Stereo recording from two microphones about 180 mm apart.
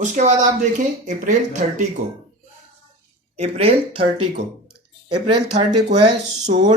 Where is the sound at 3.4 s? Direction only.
35° right (ahead or behind).